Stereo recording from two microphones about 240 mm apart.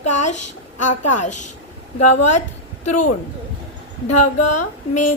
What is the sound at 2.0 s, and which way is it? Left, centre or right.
Speech, left.